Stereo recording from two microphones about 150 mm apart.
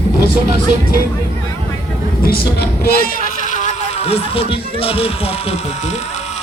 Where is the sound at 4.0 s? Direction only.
40° left (ahead or behind).